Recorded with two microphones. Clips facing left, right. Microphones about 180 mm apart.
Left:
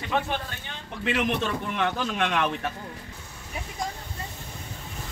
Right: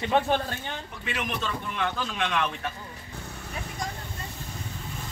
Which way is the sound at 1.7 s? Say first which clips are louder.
Left 3 dB; 50° left (ahead or behind).